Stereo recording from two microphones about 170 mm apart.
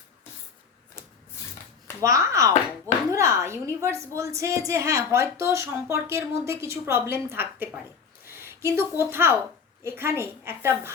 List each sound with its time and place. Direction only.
2.0 s a woman's voice: 20° right (ahead or behind)